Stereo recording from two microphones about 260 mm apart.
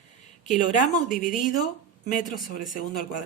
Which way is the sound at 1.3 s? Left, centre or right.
Left.